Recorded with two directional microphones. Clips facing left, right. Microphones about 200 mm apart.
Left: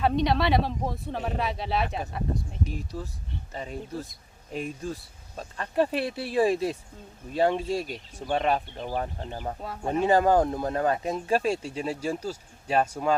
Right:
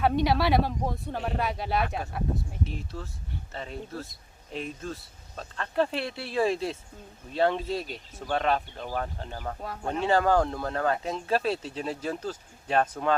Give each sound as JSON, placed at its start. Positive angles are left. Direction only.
{"t": 0.0, "sound": "speech", "side_deg": -5}
{"t": 2.9, "sound": "speech", "side_deg": 15}
{"t": 9.6, "sound": "speech", "side_deg": 5}